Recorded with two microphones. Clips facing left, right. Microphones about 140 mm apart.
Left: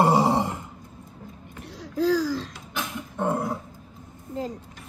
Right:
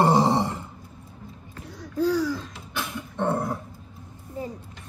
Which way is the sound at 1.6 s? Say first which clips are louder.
Even; 85° left.